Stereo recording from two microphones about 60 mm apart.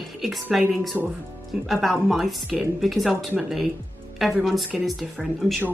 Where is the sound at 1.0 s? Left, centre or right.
Right.